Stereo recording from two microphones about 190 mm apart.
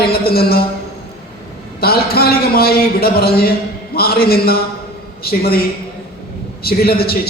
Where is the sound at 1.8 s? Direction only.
55° left (ahead or behind).